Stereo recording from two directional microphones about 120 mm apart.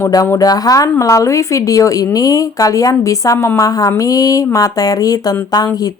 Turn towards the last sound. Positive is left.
turn(degrees=30)  # may be behind; listen again after turning